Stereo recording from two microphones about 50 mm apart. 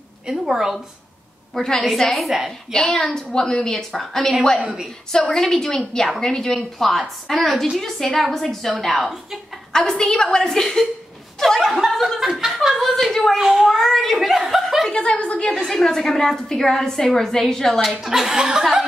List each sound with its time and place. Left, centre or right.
0.3 s a woman's voice: centre
1.5 s a woman's voice: centre
2.7 s a woman's voice: centre
4.6 s a woman's voice: centre
5.3 s a woman's voice: centre
13.4 s a woman's voice: centre
13.7 s speech: centre
14.9 s a woman's voice: left
15.7 s a woman's voice: centre
18.0 s a woman's voice: centre